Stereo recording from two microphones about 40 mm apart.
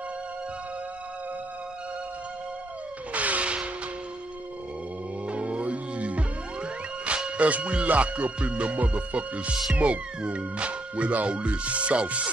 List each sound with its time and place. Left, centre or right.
3.1 s a sound: right
5.2 s music: right
7.3 s speech: right